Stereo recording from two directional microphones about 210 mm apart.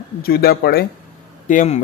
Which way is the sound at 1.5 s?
35° left (ahead or behind).